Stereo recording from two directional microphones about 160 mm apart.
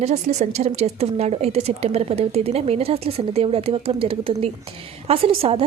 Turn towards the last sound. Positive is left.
turn(degrees=-35)  # may be behind; listen again after turning